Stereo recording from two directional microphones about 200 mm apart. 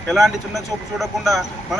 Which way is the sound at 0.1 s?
Centre (ahead or behind).